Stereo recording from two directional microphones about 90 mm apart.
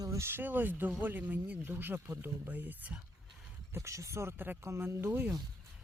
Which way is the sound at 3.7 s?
35° right (ahead or behind).